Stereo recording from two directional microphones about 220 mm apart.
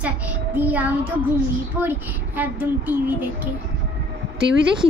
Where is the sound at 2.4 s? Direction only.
5° right (ahead or behind).